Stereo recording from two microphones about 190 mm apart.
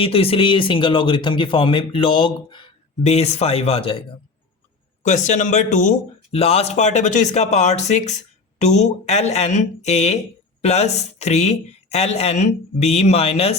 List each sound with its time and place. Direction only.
0.0 s speech: 30° left (ahead or behind)
5.0 s speech: 40° left (ahead or behind)